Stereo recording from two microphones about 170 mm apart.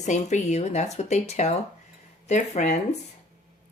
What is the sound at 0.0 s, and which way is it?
Speech, 45° left (ahead or behind).